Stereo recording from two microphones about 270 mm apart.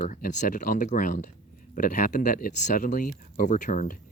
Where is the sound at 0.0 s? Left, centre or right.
Left.